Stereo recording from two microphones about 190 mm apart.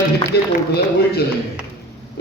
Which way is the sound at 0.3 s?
60° left (ahead or behind).